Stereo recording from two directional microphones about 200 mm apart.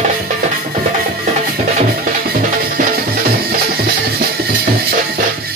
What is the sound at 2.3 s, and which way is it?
Music, 45° right (ahead or behind).